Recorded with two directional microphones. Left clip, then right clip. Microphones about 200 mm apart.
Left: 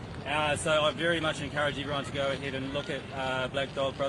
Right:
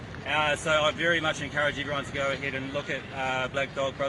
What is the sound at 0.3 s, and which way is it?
Speech, 10° right (ahead or behind).